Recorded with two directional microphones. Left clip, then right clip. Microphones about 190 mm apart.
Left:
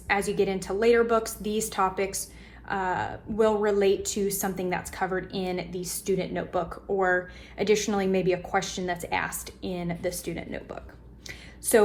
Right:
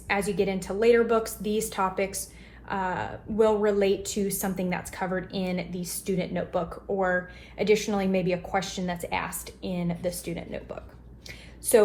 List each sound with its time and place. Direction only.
0.1 s a woman's voice: 45° left (ahead or behind)